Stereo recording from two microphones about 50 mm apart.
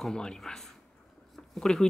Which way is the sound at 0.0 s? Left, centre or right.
Centre.